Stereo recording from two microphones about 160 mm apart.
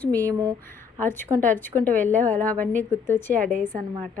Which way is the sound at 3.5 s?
55° right (ahead or behind).